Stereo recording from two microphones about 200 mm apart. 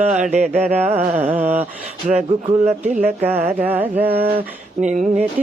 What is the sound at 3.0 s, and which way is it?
Speech, 10° right (ahead or behind).